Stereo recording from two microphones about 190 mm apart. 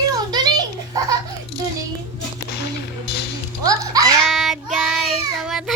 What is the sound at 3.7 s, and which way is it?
Music, 20° right (ahead or behind).